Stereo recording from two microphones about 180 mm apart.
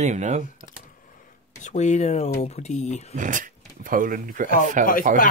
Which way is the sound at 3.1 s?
45° right (ahead or behind).